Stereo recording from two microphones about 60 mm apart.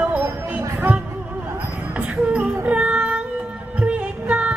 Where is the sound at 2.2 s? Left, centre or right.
Centre.